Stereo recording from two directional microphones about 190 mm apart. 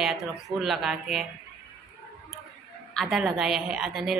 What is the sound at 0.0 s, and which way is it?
Speech, centre (ahead or behind).